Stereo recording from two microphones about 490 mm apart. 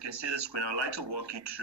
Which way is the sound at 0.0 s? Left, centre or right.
Right.